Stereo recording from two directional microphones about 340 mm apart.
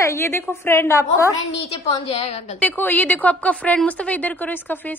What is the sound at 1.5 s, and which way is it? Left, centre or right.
Speech, left.